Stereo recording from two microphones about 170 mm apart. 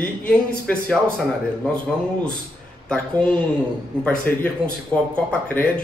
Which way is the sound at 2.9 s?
5° left (ahead or behind).